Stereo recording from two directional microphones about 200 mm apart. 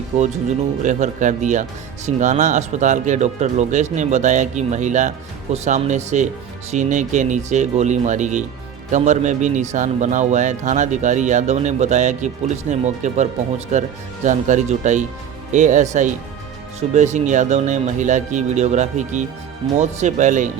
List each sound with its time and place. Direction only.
0.1 s speech: 35° right (ahead or behind)